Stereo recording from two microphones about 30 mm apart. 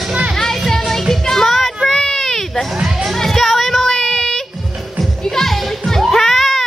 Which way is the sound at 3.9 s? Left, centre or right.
Centre.